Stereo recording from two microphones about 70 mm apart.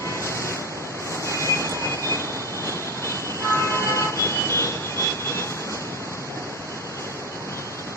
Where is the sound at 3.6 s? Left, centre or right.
Left.